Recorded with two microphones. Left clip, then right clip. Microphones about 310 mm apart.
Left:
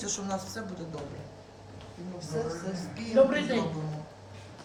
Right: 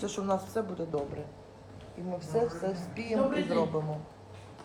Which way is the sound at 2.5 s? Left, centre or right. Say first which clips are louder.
Right 2 dB; centre.